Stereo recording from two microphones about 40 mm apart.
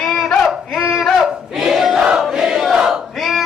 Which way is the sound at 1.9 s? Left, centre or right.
Right.